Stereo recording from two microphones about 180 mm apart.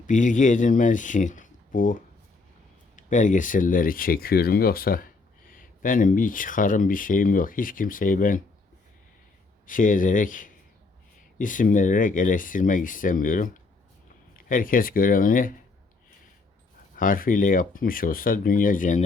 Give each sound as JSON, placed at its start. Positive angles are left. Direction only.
{"t": 0.1, "sound": "speech", "side_deg": 45}
{"t": 9.6, "sound": "speech", "side_deg": 50}
{"t": 17.0, "sound": "speech", "side_deg": 50}